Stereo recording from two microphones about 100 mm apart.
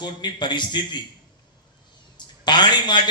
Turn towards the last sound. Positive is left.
turn(degrees=50)  # may be behind; listen again after turning